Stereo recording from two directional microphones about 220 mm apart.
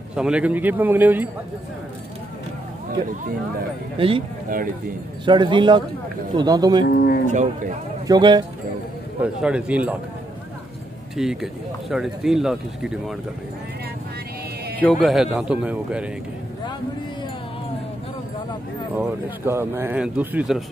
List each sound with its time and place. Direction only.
0.1 s speech: 5° right (ahead or behind)
4.0 s speech: 25° right (ahead or behind)
5.2 s speech: 20° right (ahead or behind)
6.9 s speech: 45° left (ahead or behind)
8.1 s speech: 20° right (ahead or behind)
9.2 s speech: 5° right (ahead or behind)
11.1 s speech: centre (ahead or behind)
14.8 s speech: 5° left (ahead or behind)
18.9 s speech: 10° right (ahead or behind)